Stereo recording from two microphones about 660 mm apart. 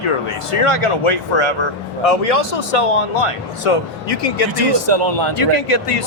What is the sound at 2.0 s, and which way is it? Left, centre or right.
Speech, left.